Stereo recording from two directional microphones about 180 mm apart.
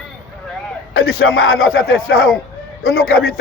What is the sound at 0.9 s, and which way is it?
Speech, 60° left (ahead or behind).